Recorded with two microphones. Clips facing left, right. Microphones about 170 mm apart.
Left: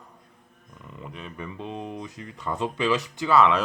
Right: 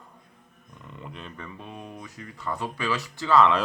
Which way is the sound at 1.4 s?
20° left (ahead or behind).